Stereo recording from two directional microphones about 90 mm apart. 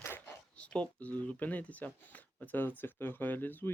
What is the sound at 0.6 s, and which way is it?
Speech, 15° left (ahead or behind).